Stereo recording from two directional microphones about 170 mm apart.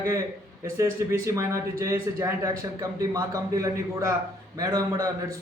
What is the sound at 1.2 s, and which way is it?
A man's voice, 15° right (ahead or behind).